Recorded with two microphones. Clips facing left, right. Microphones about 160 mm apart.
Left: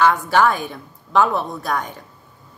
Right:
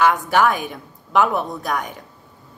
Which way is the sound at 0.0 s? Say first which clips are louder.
Left 1 dB; 15° right (ahead or behind).